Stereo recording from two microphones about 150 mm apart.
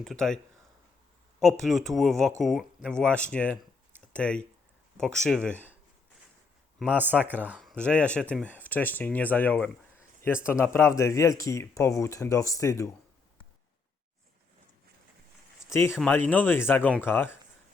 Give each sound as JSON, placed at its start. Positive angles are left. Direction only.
{"t": 0.0, "sound": "speech", "side_deg": 5}
{"t": 1.4, "sound": "speech", "side_deg": 0}
{"t": 6.7, "sound": "a man's voice", "side_deg": -10}
{"t": 7.7, "sound": "speech", "side_deg": 5}
{"t": 15.6, "sound": "speech", "side_deg": 15}